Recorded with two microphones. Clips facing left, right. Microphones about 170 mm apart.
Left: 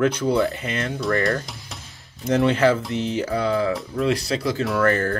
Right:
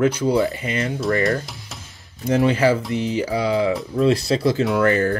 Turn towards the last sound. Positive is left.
turn(degrees=-15)  # may be behind; listen again after turning